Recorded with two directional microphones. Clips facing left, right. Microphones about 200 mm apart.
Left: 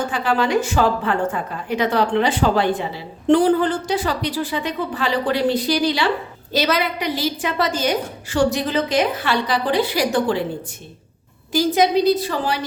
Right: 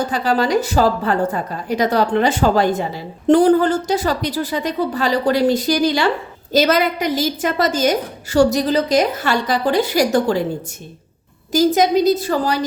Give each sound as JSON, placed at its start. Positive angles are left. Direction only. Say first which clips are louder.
{"t": 0.0, "sound": "a woman's voice", "louder": "right 2 dB", "side_deg": -40}
{"t": 11.5, "sound": "a woman's voice", "louder": "right 3 dB", "side_deg": -45}